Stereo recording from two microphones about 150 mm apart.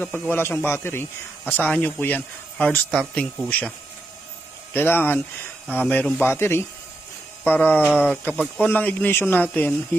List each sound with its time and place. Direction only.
0.0 s speech: 15° left (ahead or behind)
4.7 s speech: 15° left (ahead or behind)